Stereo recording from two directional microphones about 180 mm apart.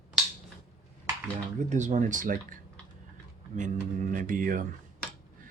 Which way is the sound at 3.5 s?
45° right (ahead or behind).